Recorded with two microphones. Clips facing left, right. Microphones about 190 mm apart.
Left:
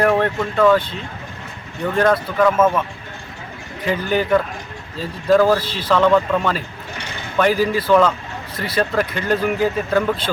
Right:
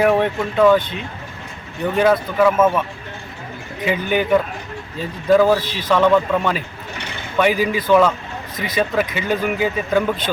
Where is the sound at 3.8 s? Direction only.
10° right (ahead or behind).